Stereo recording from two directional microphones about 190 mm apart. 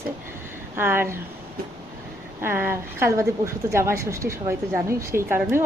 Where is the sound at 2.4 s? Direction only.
10° right (ahead or behind).